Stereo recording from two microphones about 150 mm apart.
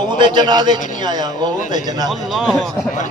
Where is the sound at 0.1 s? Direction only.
30° right (ahead or behind).